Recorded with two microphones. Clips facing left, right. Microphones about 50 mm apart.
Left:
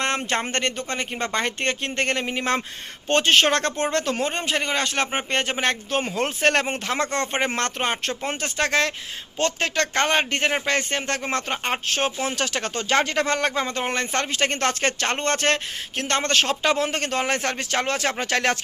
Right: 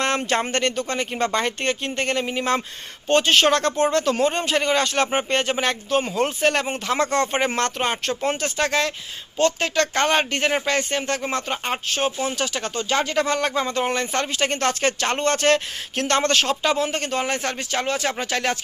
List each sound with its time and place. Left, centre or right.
0.5 s speech: left
1.6 s speech: left
6.4 s speech: left
6.9 s speech: left
13.5 s speech: left
15.5 s speech: left
16.6 s speech: left